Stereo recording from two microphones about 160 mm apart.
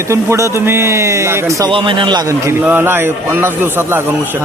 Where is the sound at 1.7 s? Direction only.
30° right (ahead or behind); by 4.0 s 15° right (ahead or behind).